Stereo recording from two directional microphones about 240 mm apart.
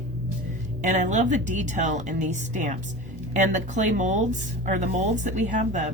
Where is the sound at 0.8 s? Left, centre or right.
Right.